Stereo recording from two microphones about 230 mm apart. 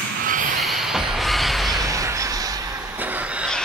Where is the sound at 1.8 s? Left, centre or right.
Centre.